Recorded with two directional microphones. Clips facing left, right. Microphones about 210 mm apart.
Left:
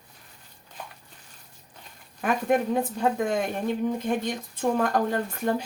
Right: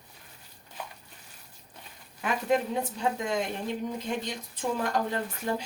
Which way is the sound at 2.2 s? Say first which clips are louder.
Left 3 dB; 55° left (ahead or behind).